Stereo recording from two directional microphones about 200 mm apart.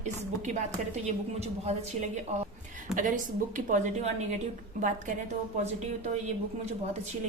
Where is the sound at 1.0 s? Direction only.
35° right (ahead or behind).